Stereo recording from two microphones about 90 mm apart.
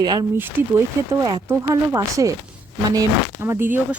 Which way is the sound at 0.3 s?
20° right (ahead or behind).